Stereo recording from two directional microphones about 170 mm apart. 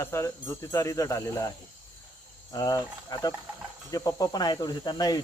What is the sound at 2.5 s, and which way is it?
Speech, 20° left (ahead or behind).